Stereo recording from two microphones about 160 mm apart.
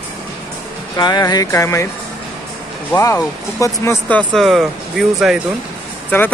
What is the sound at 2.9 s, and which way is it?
Speech, 15° left (ahead or behind).